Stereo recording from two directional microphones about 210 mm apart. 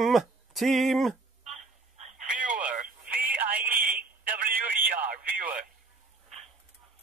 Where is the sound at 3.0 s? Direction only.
10° right (ahead or behind).